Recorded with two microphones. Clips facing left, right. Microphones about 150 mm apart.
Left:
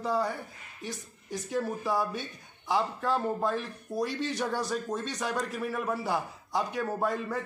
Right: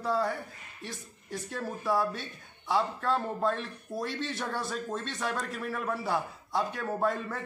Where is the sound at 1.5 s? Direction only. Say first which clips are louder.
Left 6 dB; 15° left (ahead or behind).